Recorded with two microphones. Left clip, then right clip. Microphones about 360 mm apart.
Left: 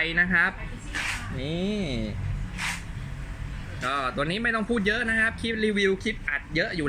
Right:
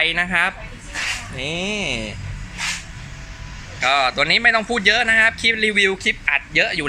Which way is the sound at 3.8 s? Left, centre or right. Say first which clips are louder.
Right 11 dB; centre.